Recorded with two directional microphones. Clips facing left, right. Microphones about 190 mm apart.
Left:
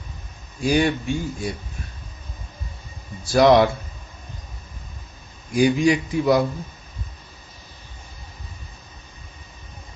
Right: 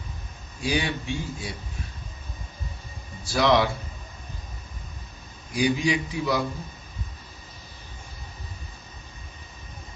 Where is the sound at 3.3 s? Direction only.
50° left (ahead or behind).